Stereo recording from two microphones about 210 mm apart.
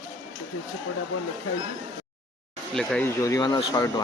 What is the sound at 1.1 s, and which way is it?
Speech, 75° left (ahead or behind).